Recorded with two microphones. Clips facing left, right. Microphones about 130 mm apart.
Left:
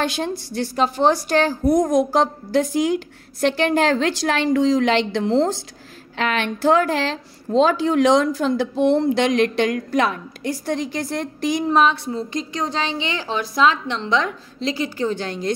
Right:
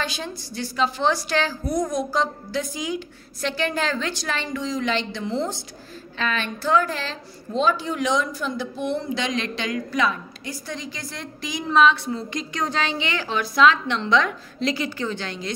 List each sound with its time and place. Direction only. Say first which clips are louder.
0.0 s a woman's voice: left 7 dB; 70° left (ahead or behind); by 1.6 s 50° left (ahead or behind)
1.6 s a woman's voice: left 8 dB; 90° left
2.1 s a woman's voice: left 6 dB; 70° left (ahead or behind); by 5.6 s 90° left
6.1 s a woman's voice: left 5 dB; 75° left (ahead or behind); by 11.8 s 60° left (ahead or behind)
11.8 s a woman's voice: even; 40° left (ahead or behind)